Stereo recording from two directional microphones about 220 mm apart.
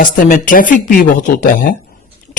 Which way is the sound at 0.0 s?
35° left (ahead or behind).